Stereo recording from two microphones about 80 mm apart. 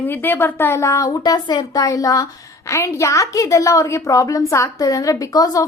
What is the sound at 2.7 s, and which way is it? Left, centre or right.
A woman's voice, left.